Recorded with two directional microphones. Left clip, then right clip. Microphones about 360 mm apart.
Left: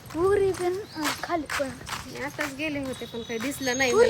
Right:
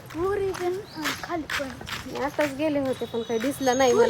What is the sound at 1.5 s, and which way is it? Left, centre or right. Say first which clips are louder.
Speech: even; centre.